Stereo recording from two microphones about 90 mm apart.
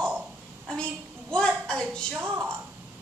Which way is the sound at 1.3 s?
10° left (ahead or behind).